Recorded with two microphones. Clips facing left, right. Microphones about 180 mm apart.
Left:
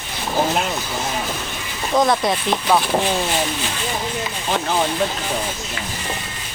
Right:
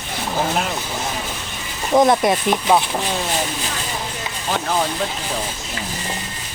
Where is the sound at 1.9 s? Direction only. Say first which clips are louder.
Right 3 dB; 20° right (ahead or behind).